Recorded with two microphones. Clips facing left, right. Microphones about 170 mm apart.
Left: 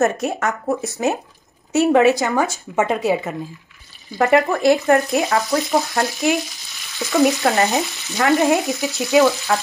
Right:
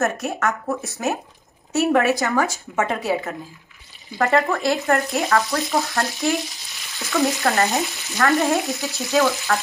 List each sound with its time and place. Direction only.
0.0 s speech: 20° left (ahead or behind)